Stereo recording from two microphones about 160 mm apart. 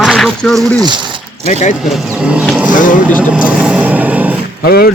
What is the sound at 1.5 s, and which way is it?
Speech, 50° left (ahead or behind).